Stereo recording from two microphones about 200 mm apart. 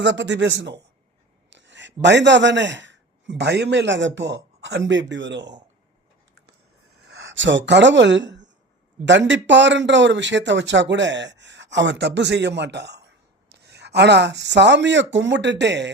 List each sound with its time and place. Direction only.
0.0 s a man's voice: 60° right (ahead or behind)
7.1 s a man's voice: 70° right (ahead or behind)